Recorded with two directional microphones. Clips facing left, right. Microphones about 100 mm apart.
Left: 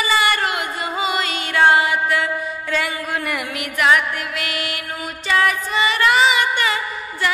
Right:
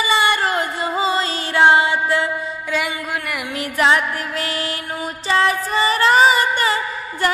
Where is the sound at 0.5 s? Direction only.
35° right (ahead or behind).